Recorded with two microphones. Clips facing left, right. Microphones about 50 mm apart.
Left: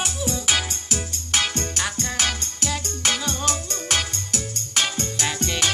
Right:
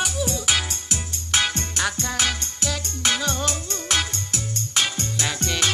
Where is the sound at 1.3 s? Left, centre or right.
Centre.